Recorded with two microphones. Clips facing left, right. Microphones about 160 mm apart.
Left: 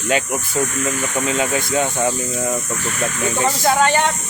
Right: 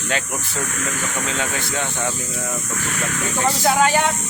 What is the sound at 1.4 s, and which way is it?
Speech, 15° left (ahead or behind).